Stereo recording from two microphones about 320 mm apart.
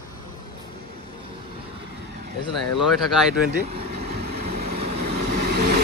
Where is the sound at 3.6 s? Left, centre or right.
Right.